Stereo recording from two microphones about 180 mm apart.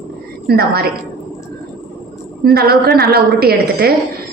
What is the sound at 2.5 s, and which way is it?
A woman's voice, 60° right (ahead or behind).